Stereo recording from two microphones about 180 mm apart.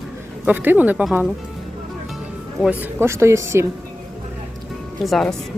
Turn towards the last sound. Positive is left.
turn(degrees=0)  # may be behind; listen again after turning